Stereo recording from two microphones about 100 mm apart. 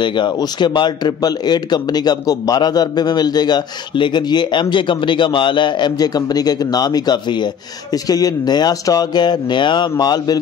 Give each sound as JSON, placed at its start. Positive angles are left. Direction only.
{"t": 0.0, "sound": "speech", "side_deg": 50}